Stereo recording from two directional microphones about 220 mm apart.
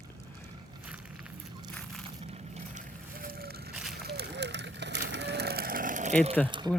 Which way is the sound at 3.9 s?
45° right (ahead or behind).